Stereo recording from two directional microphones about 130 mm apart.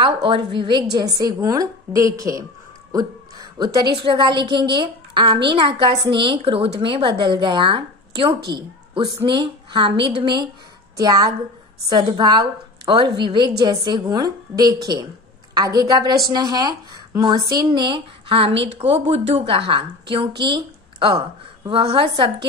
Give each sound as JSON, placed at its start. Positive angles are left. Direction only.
{"t": 0.0, "sound": "a woman's voice", "side_deg": -40}